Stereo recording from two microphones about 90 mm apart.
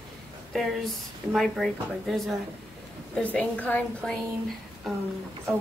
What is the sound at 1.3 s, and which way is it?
Speech, centre (ahead or behind).